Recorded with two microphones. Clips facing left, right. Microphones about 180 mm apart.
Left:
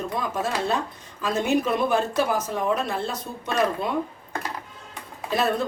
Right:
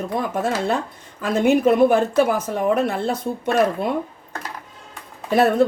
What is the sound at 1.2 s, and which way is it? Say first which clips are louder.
A woman's voice: right 6 dB; 55° right (ahead or behind).